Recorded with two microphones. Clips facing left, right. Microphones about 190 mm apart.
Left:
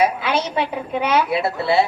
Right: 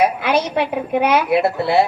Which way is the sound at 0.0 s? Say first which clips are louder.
Right 2 dB; 60° right (ahead or behind).